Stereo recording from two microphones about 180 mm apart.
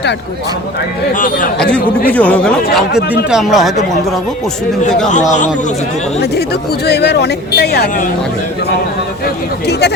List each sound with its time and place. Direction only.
1.1 s speech: 45° left (ahead or behind)
1.5 s speech: 5° left (ahead or behind)
6.3 s speech: 65° left (ahead or behind)
9.2 s speech: 65° left (ahead or behind)